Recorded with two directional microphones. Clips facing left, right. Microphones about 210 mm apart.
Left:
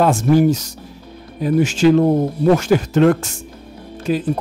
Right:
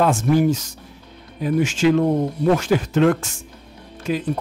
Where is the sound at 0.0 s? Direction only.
35° left (ahead or behind).